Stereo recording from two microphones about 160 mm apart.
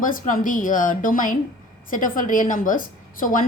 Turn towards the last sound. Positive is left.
turn(degrees=55)  # may be behind; listen again after turning